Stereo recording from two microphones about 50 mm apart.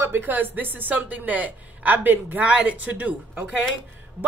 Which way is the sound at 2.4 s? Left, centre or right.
Right.